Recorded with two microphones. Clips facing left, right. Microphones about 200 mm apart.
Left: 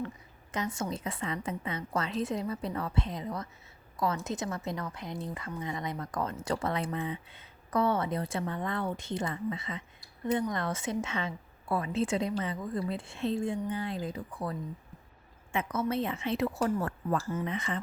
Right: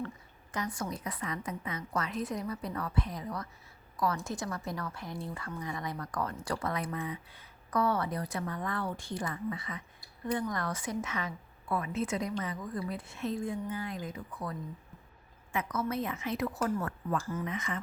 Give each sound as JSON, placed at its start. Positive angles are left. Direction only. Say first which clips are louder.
{"t": 0.5, "sound": "speech", "louder": "left 2 dB", "side_deg": 25}
{"t": 15.5, "sound": "speech", "louder": "left 2 dB", "side_deg": 25}